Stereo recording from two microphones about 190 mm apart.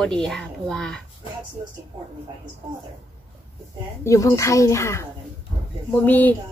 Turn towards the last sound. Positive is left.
turn(degrees=10)  # may be behind; listen again after turning